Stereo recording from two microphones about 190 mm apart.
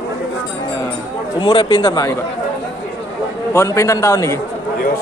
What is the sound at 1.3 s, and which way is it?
Speech, 25° left (ahead or behind).